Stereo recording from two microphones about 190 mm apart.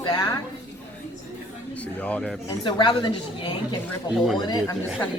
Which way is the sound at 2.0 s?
5° left (ahead or behind).